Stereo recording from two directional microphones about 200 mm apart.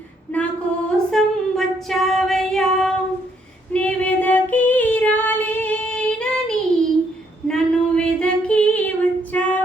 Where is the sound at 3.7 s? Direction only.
5° left (ahead or behind).